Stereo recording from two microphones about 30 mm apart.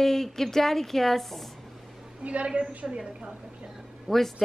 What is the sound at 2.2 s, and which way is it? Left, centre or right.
Speech, right.